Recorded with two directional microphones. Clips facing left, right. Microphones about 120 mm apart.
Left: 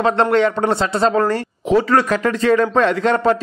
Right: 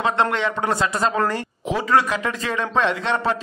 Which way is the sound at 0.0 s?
35° left (ahead or behind).